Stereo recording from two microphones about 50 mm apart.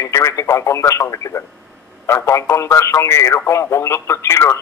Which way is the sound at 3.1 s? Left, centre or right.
Left.